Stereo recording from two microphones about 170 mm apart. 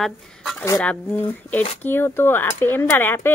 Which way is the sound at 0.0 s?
Centre (ahead or behind).